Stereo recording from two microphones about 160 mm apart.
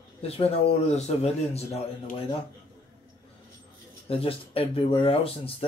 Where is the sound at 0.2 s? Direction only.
40° left (ahead or behind).